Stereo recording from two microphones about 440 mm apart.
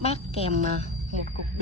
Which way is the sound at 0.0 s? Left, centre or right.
Centre.